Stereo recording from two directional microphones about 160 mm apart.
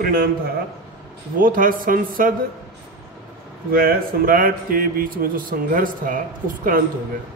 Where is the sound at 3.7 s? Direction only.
65° right (ahead or behind).